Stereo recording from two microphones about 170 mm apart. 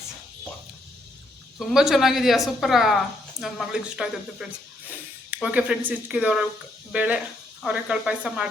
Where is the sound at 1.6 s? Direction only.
Centre (ahead or behind).